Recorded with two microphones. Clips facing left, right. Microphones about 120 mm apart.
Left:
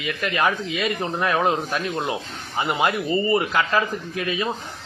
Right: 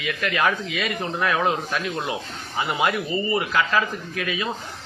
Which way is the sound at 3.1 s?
40° left (ahead or behind).